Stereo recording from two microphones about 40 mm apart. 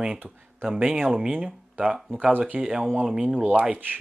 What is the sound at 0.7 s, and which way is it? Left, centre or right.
Speech, centre.